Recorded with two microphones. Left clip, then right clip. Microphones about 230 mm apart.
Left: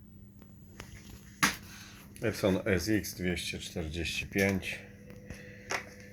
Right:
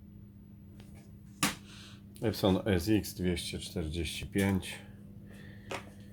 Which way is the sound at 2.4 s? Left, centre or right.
Right.